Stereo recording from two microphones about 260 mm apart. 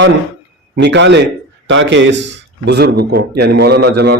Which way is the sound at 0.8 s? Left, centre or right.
Right.